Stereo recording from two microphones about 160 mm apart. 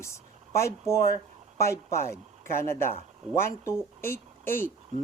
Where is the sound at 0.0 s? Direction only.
15° left (ahead or behind).